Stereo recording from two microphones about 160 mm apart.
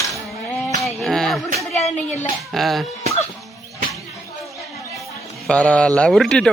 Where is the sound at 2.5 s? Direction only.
Centre (ahead or behind).